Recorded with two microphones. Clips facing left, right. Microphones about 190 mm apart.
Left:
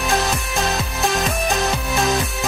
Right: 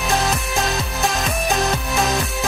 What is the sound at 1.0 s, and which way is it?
Music, centre (ahead or behind).